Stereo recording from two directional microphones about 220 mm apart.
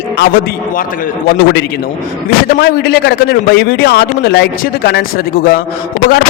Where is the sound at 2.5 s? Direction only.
45° left (ahead or behind).